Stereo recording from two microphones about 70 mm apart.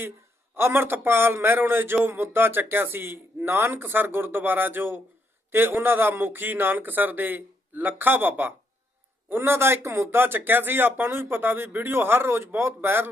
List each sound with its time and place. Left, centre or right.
0.5 s a man's voice: right